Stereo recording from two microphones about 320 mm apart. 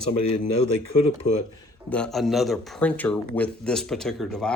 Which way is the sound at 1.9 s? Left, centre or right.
Centre.